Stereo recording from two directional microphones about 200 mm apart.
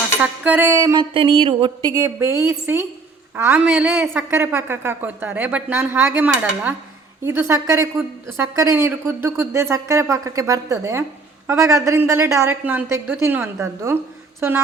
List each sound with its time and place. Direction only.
0.2 s a woman's voice: 10° right (ahead or behind)